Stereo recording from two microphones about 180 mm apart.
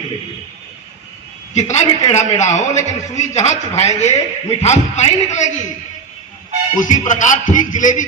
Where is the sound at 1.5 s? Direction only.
40° left (ahead or behind).